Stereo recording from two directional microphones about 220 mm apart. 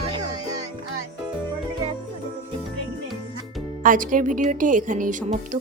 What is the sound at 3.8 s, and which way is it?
Speech, 40° right (ahead or behind).